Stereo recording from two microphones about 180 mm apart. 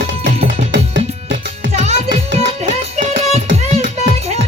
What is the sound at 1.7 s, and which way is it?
Music, 40° right (ahead or behind).